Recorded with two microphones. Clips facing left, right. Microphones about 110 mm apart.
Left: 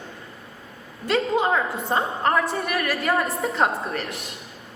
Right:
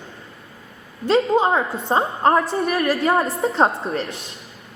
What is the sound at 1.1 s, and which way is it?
A woman's voice, 30° right (ahead or behind).